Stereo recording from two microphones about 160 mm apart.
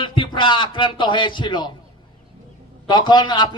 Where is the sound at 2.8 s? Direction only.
30° left (ahead or behind).